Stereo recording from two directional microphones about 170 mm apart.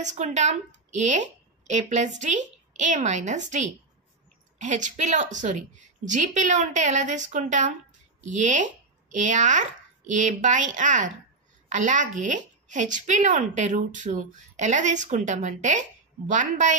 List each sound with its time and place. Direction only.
0.0 s a woman's voice: 45° right (ahead or behind)